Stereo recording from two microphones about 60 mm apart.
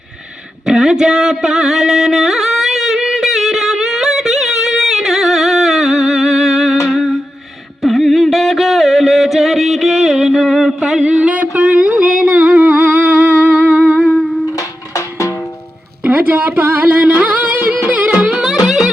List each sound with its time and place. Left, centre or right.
0.6 s music: centre
6.8 s humming: centre
7.8 s music: centre
10.8 s a sound: centre
11.0 s a sound: centre
14.5 s music: left
16.0 s music: right